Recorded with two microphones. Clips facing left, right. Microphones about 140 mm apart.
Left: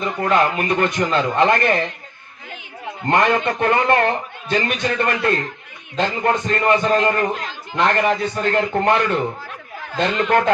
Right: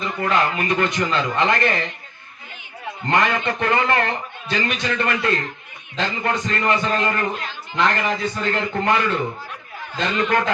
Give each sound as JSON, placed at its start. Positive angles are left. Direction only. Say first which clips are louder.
{"t": 0.0, "sound": "a man's voice", "louder": "left 3 dB", "side_deg": 50}
{"t": 3.1, "sound": "a man's voice", "louder": "left 3 dB", "side_deg": 50}
{"t": 7.0, "sound": "a man's voice", "louder": "left 4 dB", "side_deg": 30}
{"t": 7.8, "sound": "a man's voice", "louder": "left 3 dB", "side_deg": 55}